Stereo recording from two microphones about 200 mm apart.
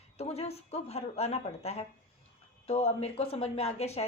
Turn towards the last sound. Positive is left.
turn(degrees=30)  # may be behind; listen again after turning